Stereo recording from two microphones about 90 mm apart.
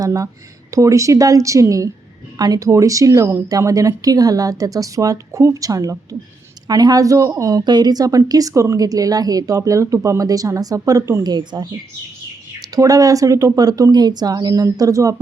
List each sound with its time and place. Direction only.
0.0 s a woman's voice: 40° right (ahead or behind)
7.6 s a woman's voice: 55° right (ahead or behind); by 11.2 s 40° right (ahead or behind)
11.2 s a woman's voice: 50° right (ahead or behind)